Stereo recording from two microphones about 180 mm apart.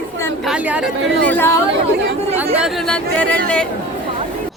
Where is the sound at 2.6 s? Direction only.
5° left (ahead or behind).